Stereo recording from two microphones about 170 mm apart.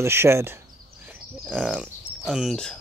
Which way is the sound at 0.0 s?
15° right (ahead or behind).